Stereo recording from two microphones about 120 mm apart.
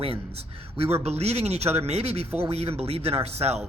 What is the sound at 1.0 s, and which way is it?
A man's voice, 65° right (ahead or behind).